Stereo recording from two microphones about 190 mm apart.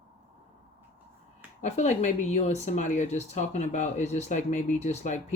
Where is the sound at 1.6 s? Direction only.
35° left (ahead or behind).